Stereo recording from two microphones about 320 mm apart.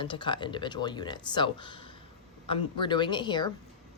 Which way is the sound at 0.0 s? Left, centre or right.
Centre.